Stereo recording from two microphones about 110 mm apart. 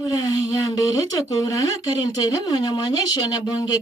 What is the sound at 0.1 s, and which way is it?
Speech, 35° left (ahead or behind).